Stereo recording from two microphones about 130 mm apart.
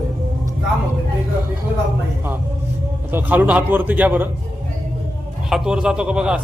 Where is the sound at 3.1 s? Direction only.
15° right (ahead or behind).